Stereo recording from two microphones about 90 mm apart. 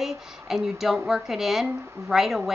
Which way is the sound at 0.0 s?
5° right (ahead or behind).